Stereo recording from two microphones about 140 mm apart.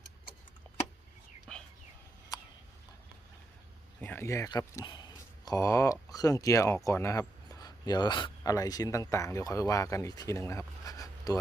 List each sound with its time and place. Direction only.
4.0 s speech: 15° left (ahead or behind)